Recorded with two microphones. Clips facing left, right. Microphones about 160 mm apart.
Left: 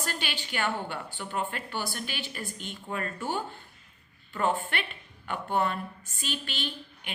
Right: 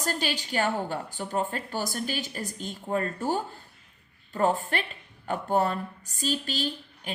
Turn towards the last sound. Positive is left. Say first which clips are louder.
# right 5 dB
turn(degrees=-35)  # may be behind; listen again after turning